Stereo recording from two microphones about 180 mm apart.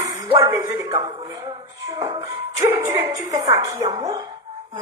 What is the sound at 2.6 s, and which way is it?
Music, 15° right (ahead or behind).